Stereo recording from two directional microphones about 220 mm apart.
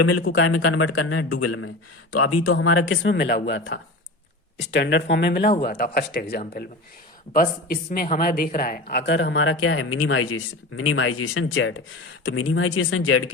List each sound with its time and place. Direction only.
0.0 s a man's voice: 75° left (ahead or behind)
2.1 s a man's voice: 90° left